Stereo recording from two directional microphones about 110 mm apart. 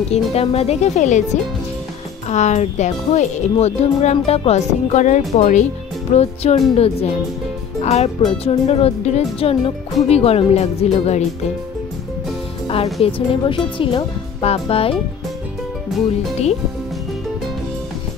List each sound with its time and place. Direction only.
0.3 s speech: 70° left (ahead or behind); by 5.7 s 90° left
6.1 s speech: 75° left (ahead or behind)
6.7 s speech: 65° left (ahead or behind)
7.8 s speech: 75° left (ahead or behind)
13.0 s speech: 55° left (ahead or behind)